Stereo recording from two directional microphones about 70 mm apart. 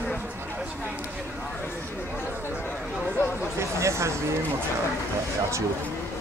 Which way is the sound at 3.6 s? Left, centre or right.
Right.